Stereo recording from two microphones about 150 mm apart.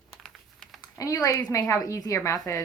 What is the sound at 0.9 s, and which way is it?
A woman's voice, 25° left (ahead or behind).